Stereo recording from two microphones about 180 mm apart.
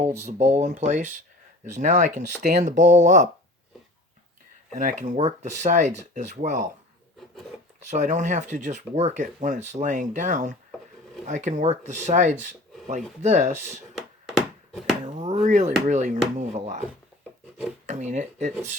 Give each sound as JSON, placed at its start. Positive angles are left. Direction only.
{"t": 0.0, "sound": "speech", "side_deg": -40}
{"t": 4.7, "sound": "speech", "side_deg": -45}
{"t": 7.9, "sound": "speech", "side_deg": -40}
{"t": 13.9, "sound": "a sound", "side_deg": 0}
{"t": 15.0, "sound": "chop", "side_deg": -40}
{"t": 15.4, "sound": "speech", "side_deg": -40}
{"t": 17.8, "sound": "speech", "side_deg": -40}